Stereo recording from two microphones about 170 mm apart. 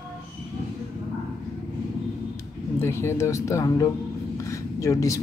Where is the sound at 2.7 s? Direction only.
15° left (ahead or behind).